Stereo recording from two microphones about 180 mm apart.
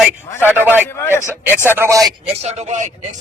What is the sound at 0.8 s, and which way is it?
Speech, 15° left (ahead or behind).